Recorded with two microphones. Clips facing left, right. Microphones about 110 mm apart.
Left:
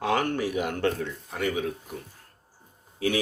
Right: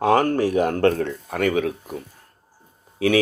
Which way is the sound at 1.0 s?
60° right (ahead or behind).